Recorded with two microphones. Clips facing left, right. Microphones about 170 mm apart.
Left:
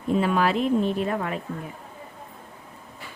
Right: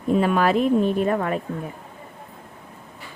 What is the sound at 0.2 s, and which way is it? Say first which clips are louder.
A woman's voice: right 3 dB; 50° right (ahead or behind).